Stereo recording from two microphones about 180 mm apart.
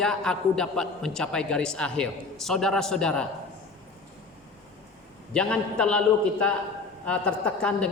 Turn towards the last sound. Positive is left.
turn(degrees=5)  # may be behind; listen again after turning